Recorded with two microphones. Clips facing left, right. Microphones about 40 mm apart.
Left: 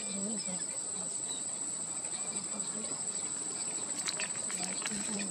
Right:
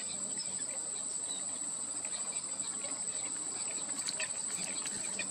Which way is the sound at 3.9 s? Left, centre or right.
Left.